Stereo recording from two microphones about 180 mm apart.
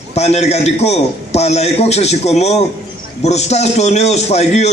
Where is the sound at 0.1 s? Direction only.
35° left (ahead or behind).